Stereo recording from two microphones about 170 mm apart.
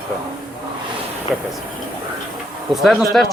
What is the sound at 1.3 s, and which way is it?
Speech, 5° right (ahead or behind).